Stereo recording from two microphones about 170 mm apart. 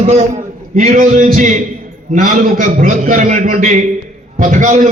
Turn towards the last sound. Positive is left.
turn(degrees=-45)  # may be behind; listen again after turning